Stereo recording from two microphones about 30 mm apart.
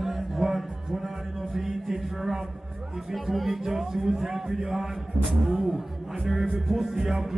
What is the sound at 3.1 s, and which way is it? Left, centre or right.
Music, centre.